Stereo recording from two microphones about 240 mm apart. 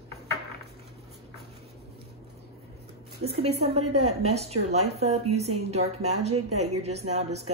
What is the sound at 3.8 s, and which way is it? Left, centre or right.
Speech, right.